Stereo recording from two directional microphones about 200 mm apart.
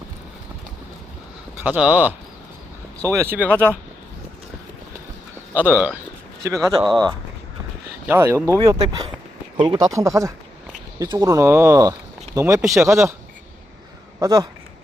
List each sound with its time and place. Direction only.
1.6 s speech: 5° right (ahead or behind)
5.5 s speech: 10° right (ahead or behind)
14.2 s speech: 15° right (ahead or behind)